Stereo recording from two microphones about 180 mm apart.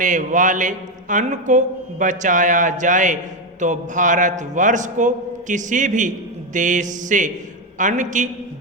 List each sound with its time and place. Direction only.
0.0 s a man's voice: 45° right (ahead or behind)